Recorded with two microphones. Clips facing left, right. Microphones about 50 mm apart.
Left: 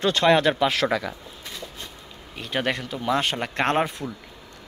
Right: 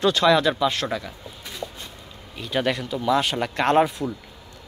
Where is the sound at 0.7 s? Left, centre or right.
Left.